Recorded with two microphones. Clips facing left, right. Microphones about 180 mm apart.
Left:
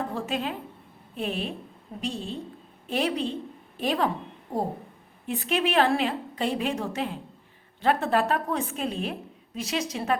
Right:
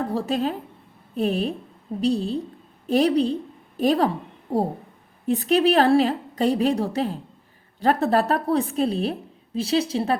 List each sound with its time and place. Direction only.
0.1 s a woman's voice: 35° right (ahead or behind)
5.2 s a woman's voice: 40° right (ahead or behind)